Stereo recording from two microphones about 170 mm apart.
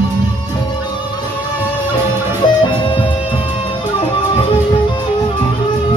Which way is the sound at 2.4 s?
30° left (ahead or behind).